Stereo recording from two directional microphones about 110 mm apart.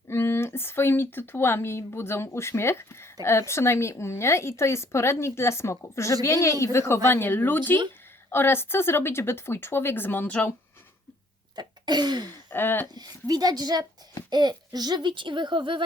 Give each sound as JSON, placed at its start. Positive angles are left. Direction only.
{"t": 0.1, "sound": "speech", "side_deg": 25}
{"t": 11.5, "sound": "throat clearing", "side_deg": -40}
{"t": 12.5, "sound": "speech", "side_deg": 20}
{"t": 12.9, "sound": "a woman's voice", "side_deg": -35}